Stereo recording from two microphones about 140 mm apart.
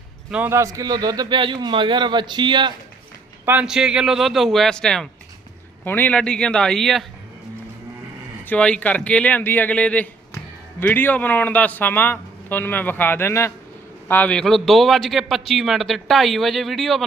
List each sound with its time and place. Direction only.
0.3 s a man's voice: 10° right (ahead or behind); by 2.7 s 35° right (ahead or behind)
3.4 s a man's voice: 10° right (ahead or behind)
8.4 s a man's voice: 10° left (ahead or behind)